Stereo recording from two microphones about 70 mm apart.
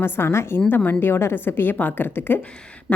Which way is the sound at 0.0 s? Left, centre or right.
Left.